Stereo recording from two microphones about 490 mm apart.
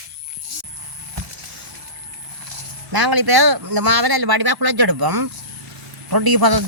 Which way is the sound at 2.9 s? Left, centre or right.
Right.